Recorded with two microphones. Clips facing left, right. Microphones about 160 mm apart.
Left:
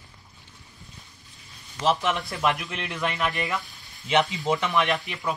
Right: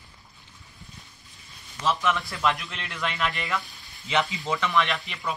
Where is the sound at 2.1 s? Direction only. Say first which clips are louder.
Left 1 dB; 20° left (ahead or behind).